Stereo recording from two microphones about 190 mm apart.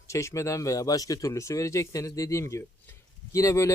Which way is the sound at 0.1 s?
15° left (ahead or behind).